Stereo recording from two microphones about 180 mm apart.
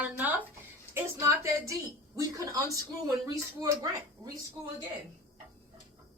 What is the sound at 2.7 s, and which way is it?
Speech, 20° right (ahead or behind).